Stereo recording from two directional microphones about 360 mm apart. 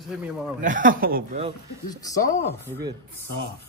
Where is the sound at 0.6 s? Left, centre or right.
Right.